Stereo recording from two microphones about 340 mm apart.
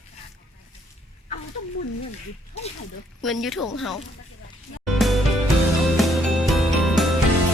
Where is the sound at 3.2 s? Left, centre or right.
Centre.